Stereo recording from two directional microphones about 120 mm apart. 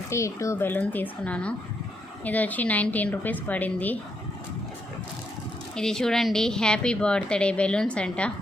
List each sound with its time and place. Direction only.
0.1 s a woman's voice: 25° left (ahead or behind)
5.7 s a woman's voice: 5° left (ahead or behind)